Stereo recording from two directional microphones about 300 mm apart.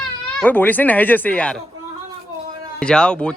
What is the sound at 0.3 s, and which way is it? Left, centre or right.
Speech, centre.